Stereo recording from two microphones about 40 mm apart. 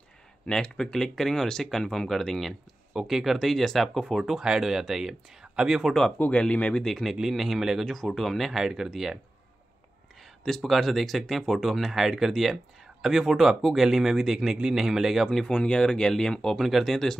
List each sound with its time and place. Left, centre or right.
0.6 s speech: left
2.9 s speech: centre
4.2 s speech: centre
6.3 s speech: left
6.8 s speech: centre
7.2 s speech: centre
7.8 s speech: centre
10.4 s speech: centre
15.2 s speech: centre
15.5 s speech: left
16.6 s speech: centre